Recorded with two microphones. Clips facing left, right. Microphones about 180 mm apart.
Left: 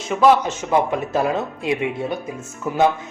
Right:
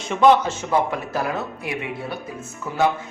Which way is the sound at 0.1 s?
5° left (ahead or behind).